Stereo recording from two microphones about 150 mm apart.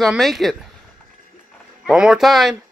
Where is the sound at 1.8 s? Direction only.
5° right (ahead or behind).